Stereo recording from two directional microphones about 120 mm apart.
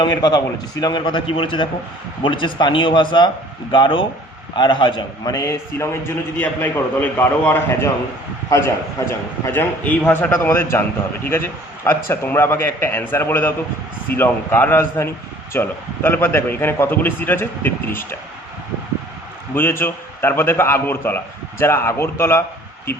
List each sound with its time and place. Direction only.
0.0 s a man's voice: 35° left (ahead or behind); by 10.8 s 20° left (ahead or behind)
11.9 s a man's voice: 20° left (ahead or behind)
19.5 s a man's voice: 15° left (ahead or behind)